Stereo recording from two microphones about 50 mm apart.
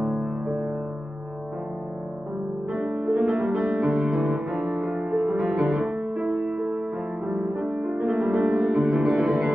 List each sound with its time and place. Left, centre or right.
0.0 s music: centre
2.7 s music: centre